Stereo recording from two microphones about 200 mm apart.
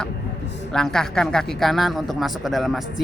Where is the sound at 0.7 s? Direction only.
Centre (ahead or behind).